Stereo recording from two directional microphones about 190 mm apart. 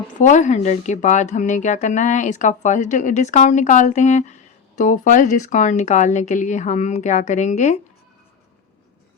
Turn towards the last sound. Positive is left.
turn(degrees=40)  # may be behind; listen again after turning